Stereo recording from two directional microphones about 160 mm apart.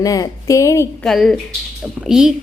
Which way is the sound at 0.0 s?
20° left (ahead or behind).